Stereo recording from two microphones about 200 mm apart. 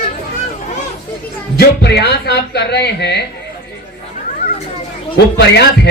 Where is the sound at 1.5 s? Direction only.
55° left (ahead or behind).